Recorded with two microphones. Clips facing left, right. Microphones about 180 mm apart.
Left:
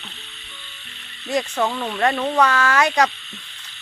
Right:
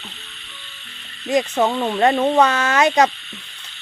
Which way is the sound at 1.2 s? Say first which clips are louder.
Right 4 dB; 20° right (ahead or behind).